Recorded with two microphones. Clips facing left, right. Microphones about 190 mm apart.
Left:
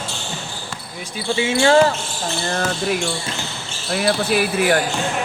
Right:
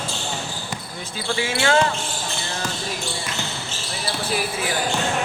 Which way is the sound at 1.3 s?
25° left (ahead or behind).